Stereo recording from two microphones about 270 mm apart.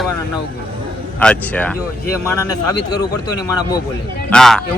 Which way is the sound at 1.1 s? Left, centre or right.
Centre.